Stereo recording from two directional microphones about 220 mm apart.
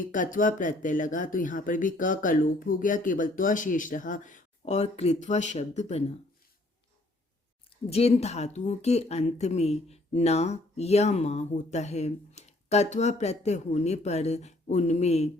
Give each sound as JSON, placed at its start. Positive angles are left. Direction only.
{"t": 0.0, "sound": "speech", "side_deg": 35}
{"t": 7.9, "sound": "speech", "side_deg": 30}